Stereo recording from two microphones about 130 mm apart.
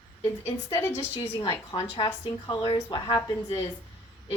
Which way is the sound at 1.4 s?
40° left (ahead or behind).